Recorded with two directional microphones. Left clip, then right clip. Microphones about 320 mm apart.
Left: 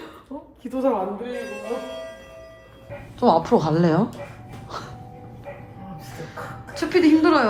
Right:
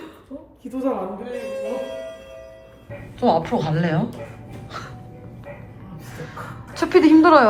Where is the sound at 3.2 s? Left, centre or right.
Centre.